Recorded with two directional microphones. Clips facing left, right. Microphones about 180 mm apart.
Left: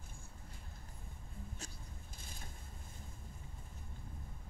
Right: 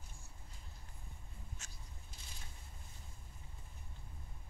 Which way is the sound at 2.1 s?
50° left (ahead or behind).